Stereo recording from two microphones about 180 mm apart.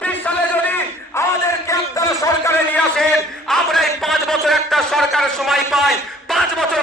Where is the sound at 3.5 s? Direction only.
Centre (ahead or behind).